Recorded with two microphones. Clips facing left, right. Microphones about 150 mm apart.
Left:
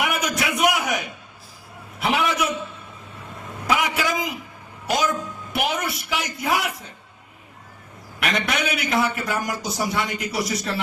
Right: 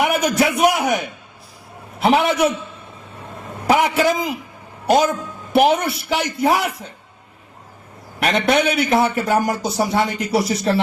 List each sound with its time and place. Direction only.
0.0 s a man's voice: 30° right (ahead or behind)
3.7 s speech: 35° right (ahead or behind)
5.5 s speech: 30° right (ahead or behind)
8.2 s speech: 35° right (ahead or behind)